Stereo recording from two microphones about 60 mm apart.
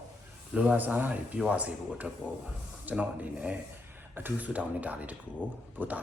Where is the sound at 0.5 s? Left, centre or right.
Right.